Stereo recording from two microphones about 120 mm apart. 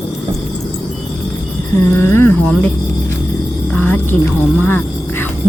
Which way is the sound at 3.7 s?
15° left (ahead or behind).